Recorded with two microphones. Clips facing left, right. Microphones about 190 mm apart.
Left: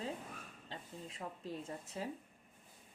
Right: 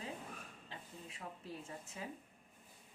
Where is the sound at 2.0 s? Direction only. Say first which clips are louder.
Left 5 dB; 35° left (ahead or behind).